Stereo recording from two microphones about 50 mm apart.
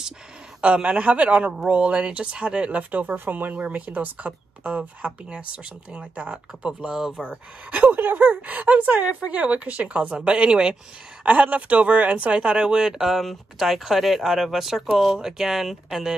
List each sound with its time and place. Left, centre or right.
0.6 s speech: right
7.9 s speech: right; by 10.8 s centre
11.2 s speech: right; by 16.2 s centre